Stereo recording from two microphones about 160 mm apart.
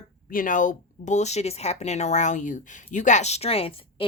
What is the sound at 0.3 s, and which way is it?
A woman's voice, 55° left (ahead or behind).